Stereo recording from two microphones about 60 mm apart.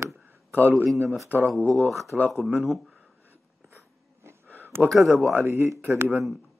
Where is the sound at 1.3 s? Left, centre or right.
Right.